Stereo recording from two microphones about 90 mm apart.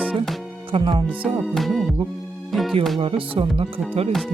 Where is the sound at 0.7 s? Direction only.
70° right (ahead or behind).